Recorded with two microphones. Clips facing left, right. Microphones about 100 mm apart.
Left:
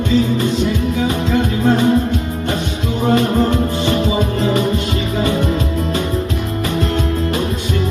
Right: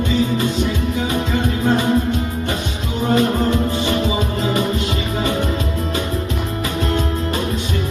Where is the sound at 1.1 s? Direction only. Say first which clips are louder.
Left 3 dB; 50° left (ahead or behind).